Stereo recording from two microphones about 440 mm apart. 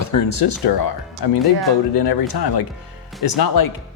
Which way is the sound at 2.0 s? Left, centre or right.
Left.